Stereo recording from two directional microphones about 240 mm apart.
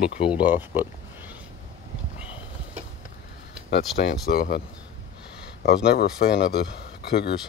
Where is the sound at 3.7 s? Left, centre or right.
Left.